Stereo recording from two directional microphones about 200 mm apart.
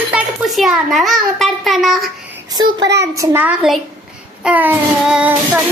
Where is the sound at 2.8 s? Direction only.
60° right (ahead or behind).